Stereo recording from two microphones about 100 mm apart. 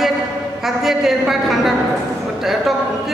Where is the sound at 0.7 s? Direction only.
5° right (ahead or behind).